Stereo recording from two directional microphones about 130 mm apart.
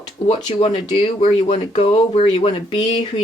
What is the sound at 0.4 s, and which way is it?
Speech, 50° left (ahead or behind).